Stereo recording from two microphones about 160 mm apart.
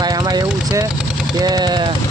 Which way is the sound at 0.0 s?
25° right (ahead or behind).